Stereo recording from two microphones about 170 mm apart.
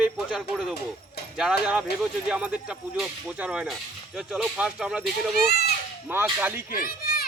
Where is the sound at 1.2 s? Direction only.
70° left (ahead or behind).